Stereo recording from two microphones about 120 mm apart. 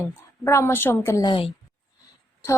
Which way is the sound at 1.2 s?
45° left (ahead or behind).